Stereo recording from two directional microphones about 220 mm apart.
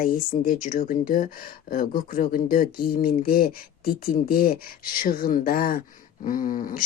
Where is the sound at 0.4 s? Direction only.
40° left (ahead or behind).